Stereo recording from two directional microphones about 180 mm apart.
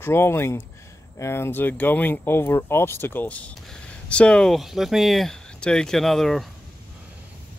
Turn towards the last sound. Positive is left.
turn(degrees=0)  # may be behind; listen again after turning